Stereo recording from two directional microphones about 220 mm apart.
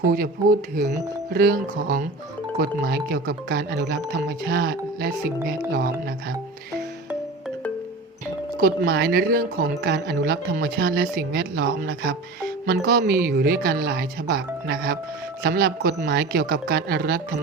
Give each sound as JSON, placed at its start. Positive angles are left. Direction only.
{"t": 0.1, "sound": "speech", "side_deg": -40}
{"t": 8.5, "sound": "speech", "side_deg": -40}